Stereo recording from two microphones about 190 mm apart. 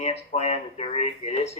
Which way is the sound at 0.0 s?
35° left (ahead or behind).